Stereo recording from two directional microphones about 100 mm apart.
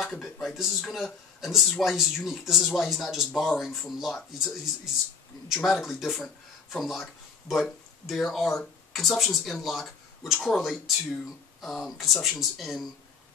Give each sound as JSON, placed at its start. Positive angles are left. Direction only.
{"t": 0.0, "sound": "speech", "side_deg": 0}